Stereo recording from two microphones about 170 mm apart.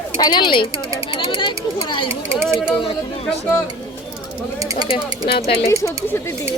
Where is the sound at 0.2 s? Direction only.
25° left (ahead or behind).